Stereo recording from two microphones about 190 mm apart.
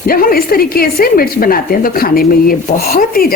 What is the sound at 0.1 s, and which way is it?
A woman's voice, 50° left (ahead or behind).